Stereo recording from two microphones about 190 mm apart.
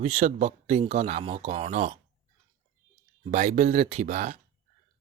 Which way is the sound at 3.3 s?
35° right (ahead or behind).